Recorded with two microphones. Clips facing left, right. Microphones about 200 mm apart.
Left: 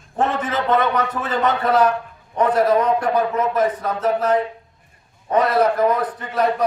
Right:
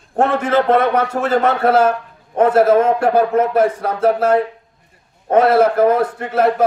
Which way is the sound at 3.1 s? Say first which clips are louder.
Right 5 dB; 60° right (ahead or behind).